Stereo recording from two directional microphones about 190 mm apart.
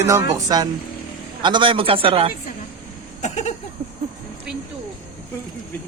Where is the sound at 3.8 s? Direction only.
30° right (ahead or behind).